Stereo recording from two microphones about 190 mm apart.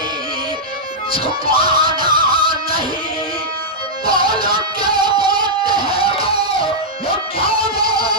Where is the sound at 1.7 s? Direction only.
25° right (ahead or behind).